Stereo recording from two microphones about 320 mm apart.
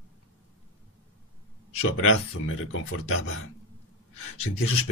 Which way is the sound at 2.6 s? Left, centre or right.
Left.